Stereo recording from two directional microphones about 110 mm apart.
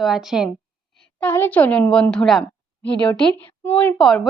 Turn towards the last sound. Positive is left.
turn(degrees=5)  # may be behind; listen again after turning